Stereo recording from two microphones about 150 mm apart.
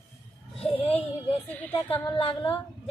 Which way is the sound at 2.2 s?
35° left (ahead or behind).